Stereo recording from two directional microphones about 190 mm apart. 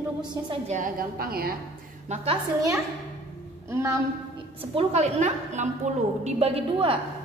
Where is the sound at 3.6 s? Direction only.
15° right (ahead or behind).